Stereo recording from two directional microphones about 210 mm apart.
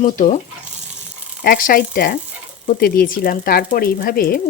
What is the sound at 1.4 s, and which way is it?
Speech, 40° left (ahead or behind).